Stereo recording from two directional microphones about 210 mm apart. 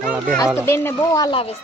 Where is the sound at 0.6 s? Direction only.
10° left (ahead or behind).